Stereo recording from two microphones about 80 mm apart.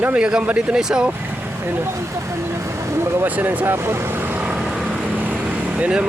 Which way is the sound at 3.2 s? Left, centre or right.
Right.